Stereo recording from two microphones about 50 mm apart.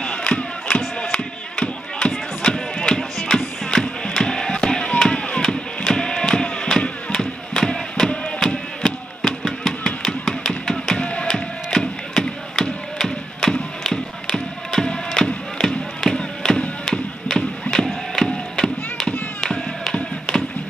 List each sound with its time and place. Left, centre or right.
0.0 s crowd: centre
1.1 s music: left
4.9 s chop: centre
8.4 s a sound: centre
11.0 s music: centre
12.6 s a sound: centre
13.0 s music: centre
16.8 s a sound: centre
19.4 s tap: centre